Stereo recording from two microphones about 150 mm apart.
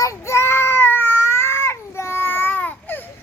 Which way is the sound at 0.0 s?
20° left (ahead or behind).